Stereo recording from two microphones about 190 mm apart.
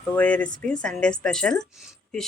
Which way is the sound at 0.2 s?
5° left (ahead or behind).